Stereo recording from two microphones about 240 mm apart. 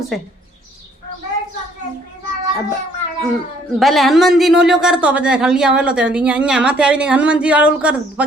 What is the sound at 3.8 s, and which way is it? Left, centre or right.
A woman's voice, centre.